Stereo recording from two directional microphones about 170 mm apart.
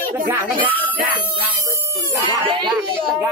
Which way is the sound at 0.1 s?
10° right (ahead or behind).